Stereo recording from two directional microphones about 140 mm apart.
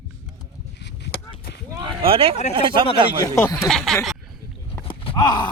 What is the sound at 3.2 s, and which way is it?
Speech, 20° left (ahead or behind).